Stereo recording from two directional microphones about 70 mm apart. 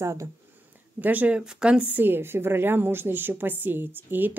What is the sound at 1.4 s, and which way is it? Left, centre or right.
A woman's voice, centre.